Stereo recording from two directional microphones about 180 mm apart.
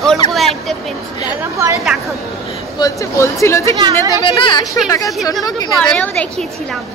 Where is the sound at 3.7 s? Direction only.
20° right (ahead or behind).